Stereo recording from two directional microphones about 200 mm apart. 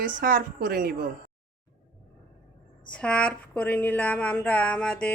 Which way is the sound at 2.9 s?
5° left (ahead or behind).